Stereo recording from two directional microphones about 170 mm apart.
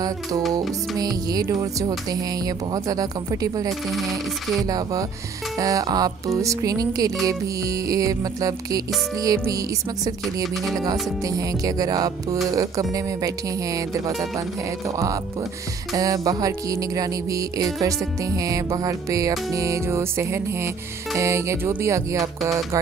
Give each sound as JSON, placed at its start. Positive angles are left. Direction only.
{"t": 0.9, "sound": "music", "side_deg": -20}
{"t": 3.9, "sound": "music", "side_deg": 0}
{"t": 4.6, "sound": "music", "side_deg": -20}